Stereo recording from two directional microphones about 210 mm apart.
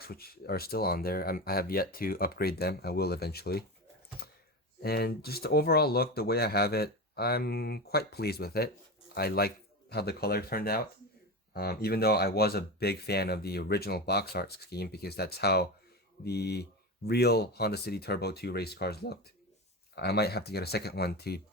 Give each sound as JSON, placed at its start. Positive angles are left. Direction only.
{"t": 0.0, "sound": "speech", "side_deg": 45}
{"t": 4.2, "sound": "a sound", "side_deg": 50}
{"t": 4.8, "sound": "speech", "side_deg": 50}